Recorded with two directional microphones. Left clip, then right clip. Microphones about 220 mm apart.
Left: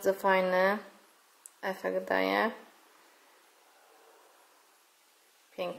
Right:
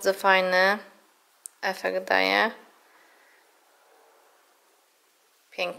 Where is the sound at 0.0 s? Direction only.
5° right (ahead or behind).